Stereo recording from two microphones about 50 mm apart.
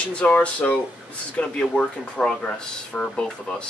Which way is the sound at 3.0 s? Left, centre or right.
Centre.